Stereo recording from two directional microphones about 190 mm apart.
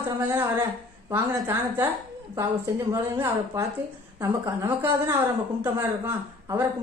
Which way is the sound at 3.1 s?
15° right (ahead or behind).